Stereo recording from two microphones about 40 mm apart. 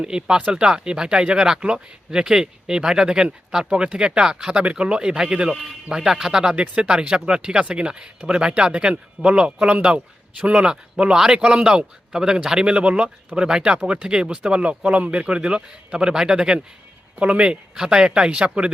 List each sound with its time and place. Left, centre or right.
0.0 s speech: right
4.5 s speech: right
5.5 s speech: centre
14.8 s speech: right
17.2 s a man's voice: right